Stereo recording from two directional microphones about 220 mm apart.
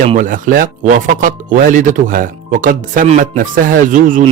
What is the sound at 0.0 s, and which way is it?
Speech, 35° right (ahead or behind).